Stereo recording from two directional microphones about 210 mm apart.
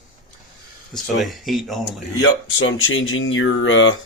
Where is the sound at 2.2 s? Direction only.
70° left (ahead or behind).